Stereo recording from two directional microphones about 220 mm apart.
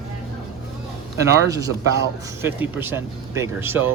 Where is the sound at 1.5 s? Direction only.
15° right (ahead or behind).